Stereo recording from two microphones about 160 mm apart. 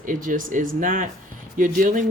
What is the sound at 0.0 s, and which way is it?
Speech, 55° right (ahead or behind).